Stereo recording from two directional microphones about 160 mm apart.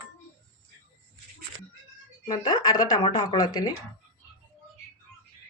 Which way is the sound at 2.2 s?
25° left (ahead or behind).